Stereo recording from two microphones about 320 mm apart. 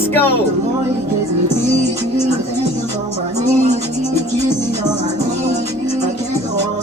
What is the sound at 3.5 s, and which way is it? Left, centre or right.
Music, right.